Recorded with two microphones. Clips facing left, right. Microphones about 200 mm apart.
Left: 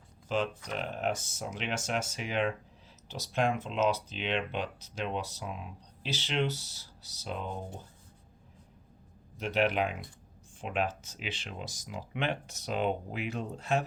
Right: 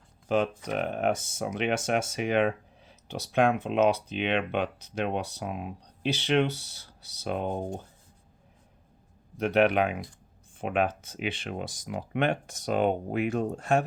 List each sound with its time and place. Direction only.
0.3 s speech: 55° right (ahead or behind)
9.4 s speech: 60° right (ahead or behind)